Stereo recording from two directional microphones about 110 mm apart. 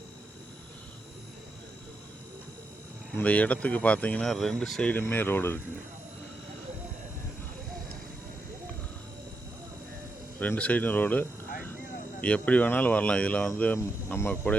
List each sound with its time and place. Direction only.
3.2 s speech: 15° left (ahead or behind)
4.9 s speech: 20° left (ahead or behind)
10.4 s speech: 15° left (ahead or behind)